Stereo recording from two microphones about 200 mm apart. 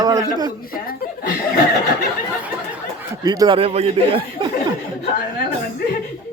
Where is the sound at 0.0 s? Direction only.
15° right (ahead or behind).